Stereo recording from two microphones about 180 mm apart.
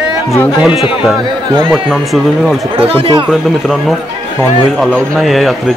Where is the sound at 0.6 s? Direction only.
5° right (ahead or behind).